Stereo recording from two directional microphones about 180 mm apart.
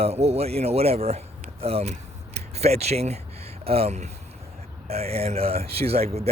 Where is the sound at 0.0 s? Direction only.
35° right (ahead or behind).